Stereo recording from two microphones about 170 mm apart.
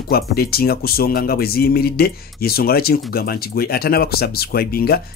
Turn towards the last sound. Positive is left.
turn(degrees=65)  # may be behind; listen again after turning